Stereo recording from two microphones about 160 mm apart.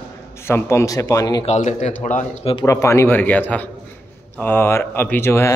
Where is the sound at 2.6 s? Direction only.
20° left (ahead or behind).